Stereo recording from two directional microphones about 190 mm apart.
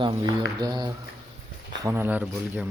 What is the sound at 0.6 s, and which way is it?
Speech, 20° right (ahead or behind).